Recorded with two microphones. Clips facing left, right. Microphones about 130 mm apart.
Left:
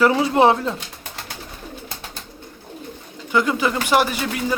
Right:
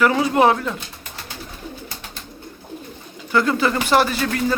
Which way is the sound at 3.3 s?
15° left (ahead or behind).